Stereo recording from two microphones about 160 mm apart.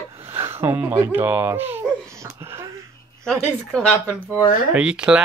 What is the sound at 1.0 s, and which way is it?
Speech, 15° right (ahead or behind).